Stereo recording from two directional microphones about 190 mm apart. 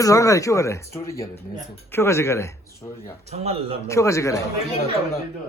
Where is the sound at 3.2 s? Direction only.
35° right (ahead or behind).